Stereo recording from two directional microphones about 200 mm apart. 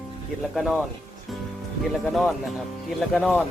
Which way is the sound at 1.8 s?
Centre (ahead or behind).